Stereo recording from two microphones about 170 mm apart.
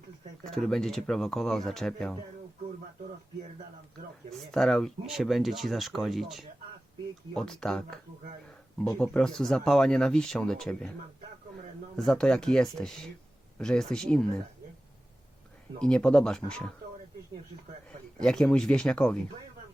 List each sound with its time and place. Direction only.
0.4 s speech: centre (ahead or behind)
4.3 s speech: centre (ahead or behind)
11.9 s speech: 5° left (ahead or behind)
15.8 s speech: 5° left (ahead or behind)
18.2 s speech: 5° left (ahead or behind)